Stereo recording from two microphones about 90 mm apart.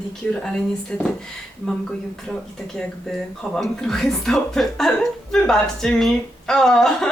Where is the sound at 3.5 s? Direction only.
5° left (ahead or behind).